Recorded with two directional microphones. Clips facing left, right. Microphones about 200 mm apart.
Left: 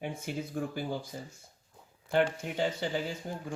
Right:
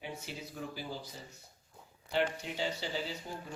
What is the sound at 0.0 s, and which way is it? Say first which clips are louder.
Speech: left 7 dB; 50° left (ahead or behind).